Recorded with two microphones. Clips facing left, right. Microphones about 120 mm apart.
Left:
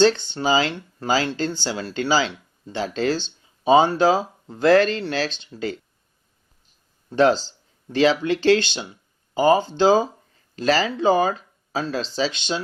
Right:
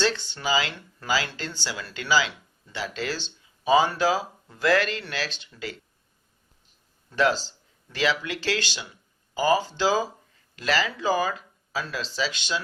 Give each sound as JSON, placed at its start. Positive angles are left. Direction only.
{"t": 0.3, "sound": "speech", "side_deg": 30}
{"t": 7.1, "sound": "speech", "side_deg": 30}